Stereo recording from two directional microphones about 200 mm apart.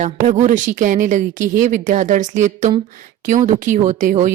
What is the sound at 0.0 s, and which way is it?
Speech, 40° right (ahead or behind).